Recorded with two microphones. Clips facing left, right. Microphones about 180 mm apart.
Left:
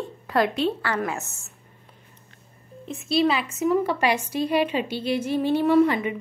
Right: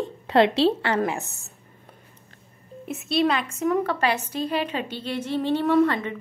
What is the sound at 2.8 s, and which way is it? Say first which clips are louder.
A woman's voice: left 1 dB; 5° right (ahead or behind).